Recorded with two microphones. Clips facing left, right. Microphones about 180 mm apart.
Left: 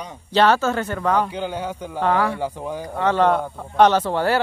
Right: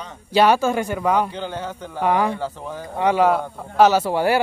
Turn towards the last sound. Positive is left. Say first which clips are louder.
# right 1 dB
turn(degrees=-10)  # may be behind; listen again after turning